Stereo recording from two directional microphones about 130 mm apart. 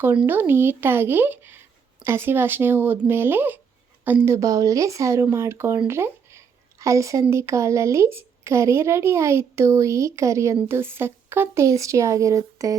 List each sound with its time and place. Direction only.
0.0 s a woman's voice: 15° right (ahead or behind)